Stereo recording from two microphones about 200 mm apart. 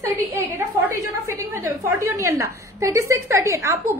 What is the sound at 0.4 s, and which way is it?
A woman's voice, 10° right (ahead or behind).